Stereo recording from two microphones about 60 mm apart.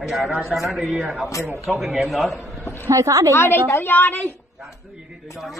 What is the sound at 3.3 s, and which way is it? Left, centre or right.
A woman's voice, left.